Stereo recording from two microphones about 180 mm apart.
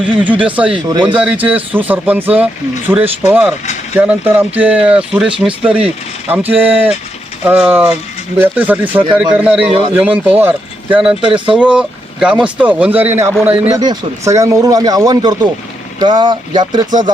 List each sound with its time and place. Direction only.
0.0 s speech: 10° right (ahead or behind)
0.9 s speech: 25° right (ahead or behind)
1.1 s speech: 5° right (ahead or behind)
13.7 s speech: 20° right (ahead or behind)